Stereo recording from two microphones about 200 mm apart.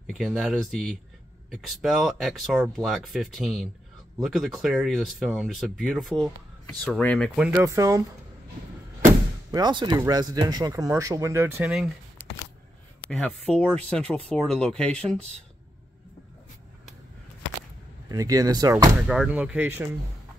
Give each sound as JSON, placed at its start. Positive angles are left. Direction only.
{"t": 0.0, "sound": "speech", "side_deg": 0}
{"t": 7.5, "sound": "speech", "side_deg": -15}
{"t": 9.5, "sound": "speech", "side_deg": -20}
{"t": 13.1, "sound": "speech", "side_deg": 5}
{"t": 18.0, "sound": "speech", "side_deg": -15}
{"t": 18.9, "sound": "speech", "side_deg": 0}